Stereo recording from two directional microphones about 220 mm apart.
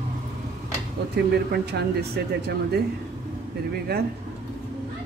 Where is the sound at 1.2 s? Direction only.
50° right (ahead or behind).